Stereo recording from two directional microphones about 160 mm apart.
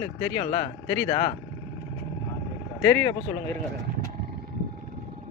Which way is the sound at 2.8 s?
15° left (ahead or behind).